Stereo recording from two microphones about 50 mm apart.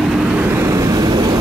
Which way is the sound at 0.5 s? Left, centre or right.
Right.